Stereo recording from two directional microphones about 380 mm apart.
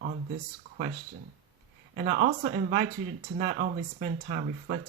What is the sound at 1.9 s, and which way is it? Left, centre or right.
Speech, right.